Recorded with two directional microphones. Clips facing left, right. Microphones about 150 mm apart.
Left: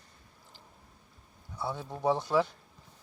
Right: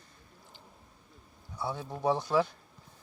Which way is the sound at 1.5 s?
Centre (ahead or behind).